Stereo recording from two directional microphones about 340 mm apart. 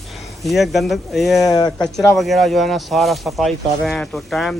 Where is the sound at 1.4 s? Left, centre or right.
Centre.